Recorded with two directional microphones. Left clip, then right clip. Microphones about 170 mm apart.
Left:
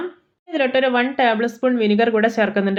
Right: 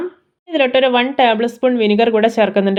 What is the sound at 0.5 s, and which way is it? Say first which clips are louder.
Speech: right 4 dB; 35° right (ahead or behind).